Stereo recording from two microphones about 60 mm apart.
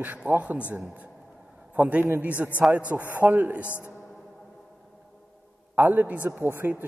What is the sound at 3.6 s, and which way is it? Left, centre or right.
Speech, left.